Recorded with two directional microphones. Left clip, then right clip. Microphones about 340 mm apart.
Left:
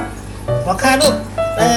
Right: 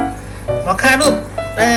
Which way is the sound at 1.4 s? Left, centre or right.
Centre.